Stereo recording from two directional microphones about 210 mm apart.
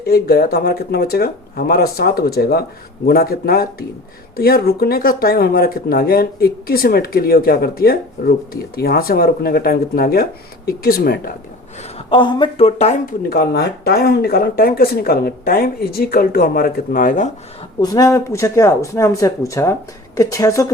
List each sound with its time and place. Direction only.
0.0 s speech: 50° left (ahead or behind)
11.9 s speech: 25° left (ahead or behind)
17.7 s speech: 15° left (ahead or behind)